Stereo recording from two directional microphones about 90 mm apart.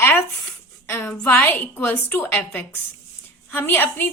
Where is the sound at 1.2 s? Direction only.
25° left (ahead or behind).